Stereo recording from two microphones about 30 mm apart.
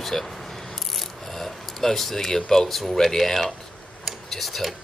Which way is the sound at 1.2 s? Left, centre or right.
Centre.